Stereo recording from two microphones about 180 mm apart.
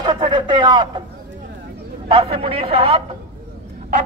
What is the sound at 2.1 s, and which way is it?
Speech, 30° right (ahead or behind).